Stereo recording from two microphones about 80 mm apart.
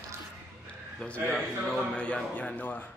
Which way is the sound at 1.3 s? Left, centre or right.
Centre.